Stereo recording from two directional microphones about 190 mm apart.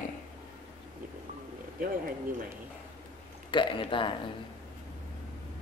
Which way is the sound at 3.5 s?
25° left (ahead or behind).